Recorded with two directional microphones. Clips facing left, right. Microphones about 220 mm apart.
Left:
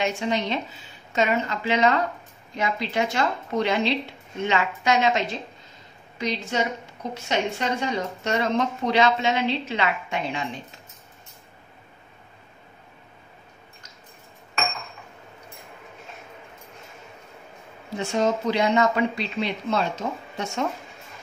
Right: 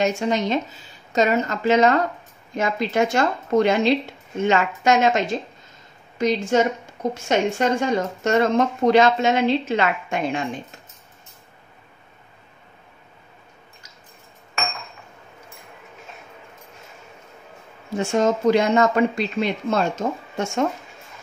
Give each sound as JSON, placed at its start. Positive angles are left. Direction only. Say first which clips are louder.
{"t": 0.0, "sound": "a woman's voice", "louder": "right 4 dB", "side_deg": -45}
{"t": 17.9, "sound": "a woman's voice", "louder": "right 4 dB", "side_deg": -45}